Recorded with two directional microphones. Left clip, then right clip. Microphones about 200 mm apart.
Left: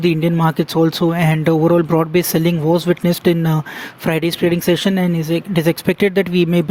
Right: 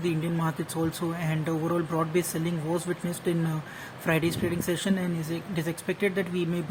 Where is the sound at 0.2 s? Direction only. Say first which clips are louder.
Left 14 dB; 45° left (ahead or behind).